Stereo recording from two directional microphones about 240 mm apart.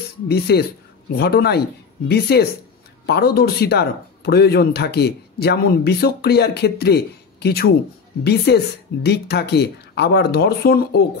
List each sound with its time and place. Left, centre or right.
0.3 s speech: left